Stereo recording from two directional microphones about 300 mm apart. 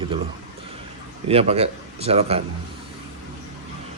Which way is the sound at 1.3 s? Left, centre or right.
Centre.